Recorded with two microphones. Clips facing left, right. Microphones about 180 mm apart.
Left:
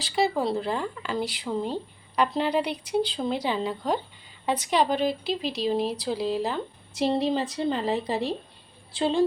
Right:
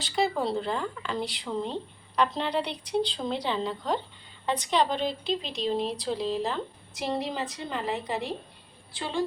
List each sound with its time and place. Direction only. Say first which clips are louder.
0.0 s a woman's voice: left 2 dB; centre (ahead or behind)
7.0 s a woman's voice: left 6 dB; 30° left (ahead or behind)